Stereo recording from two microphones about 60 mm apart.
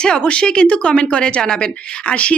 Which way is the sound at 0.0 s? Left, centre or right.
Centre.